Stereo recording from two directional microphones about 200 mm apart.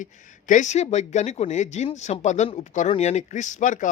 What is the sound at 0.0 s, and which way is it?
Speech, 40° left (ahead or behind).